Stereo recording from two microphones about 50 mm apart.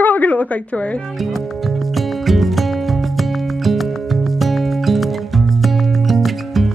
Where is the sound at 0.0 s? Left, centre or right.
Left.